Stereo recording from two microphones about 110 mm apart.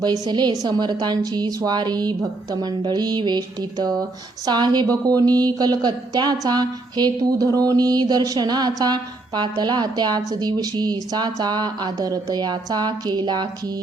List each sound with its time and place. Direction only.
0.0 s a woman's voice: 40° right (ahead or behind)